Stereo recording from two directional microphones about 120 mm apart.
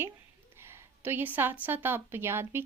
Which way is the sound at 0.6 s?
20° right (ahead or behind).